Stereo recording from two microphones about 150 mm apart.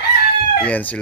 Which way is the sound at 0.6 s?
10° left (ahead or behind).